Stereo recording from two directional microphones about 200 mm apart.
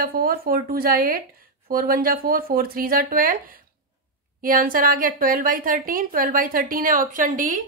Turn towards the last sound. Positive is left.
turn(degrees=-40)  # may be behind; listen again after turning